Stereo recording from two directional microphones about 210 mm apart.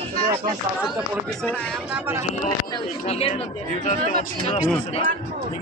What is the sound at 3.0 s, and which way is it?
Speech, 30° left (ahead or behind).